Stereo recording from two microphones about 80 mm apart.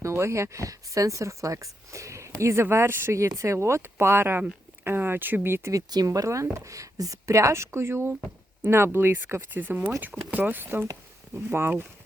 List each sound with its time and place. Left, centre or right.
0.0 s speech: right
5.7 s speech: right
6.1 s speech: right